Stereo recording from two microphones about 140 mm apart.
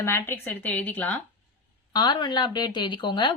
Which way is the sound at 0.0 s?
20° left (ahead or behind).